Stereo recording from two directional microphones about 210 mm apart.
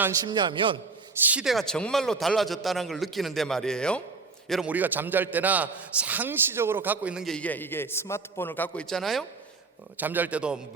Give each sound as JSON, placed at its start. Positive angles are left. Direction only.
{"t": 0.0, "sound": "a man's voice", "side_deg": -20}
{"t": 1.2, "sound": "a man's voice", "side_deg": -5}